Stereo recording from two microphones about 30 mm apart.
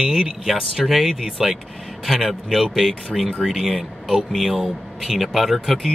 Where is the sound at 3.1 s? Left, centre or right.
Right.